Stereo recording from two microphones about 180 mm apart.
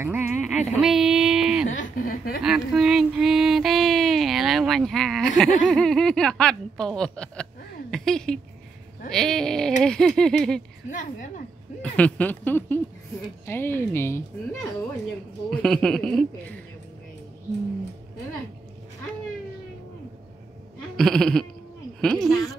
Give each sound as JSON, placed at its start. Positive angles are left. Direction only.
{"t": 0.0, "sound": "speech", "side_deg": -10}
{"t": 1.7, "sound": "a sound", "side_deg": 50}
{"t": 2.4, "sound": "a sound", "side_deg": -5}
{"t": 5.7, "sound": "speech", "side_deg": 5}
{"t": 10.9, "sound": "a sound", "side_deg": 45}
{"t": 11.8, "sound": "speech", "side_deg": 10}
{"t": 15.6, "sound": "speech", "side_deg": 0}
{"t": 20.9, "sound": "bleat", "side_deg": 5}
{"t": 22.0, "sound": "speech", "side_deg": 5}